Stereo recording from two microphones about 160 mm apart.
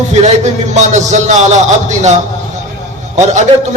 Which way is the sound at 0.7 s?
45° right (ahead or behind).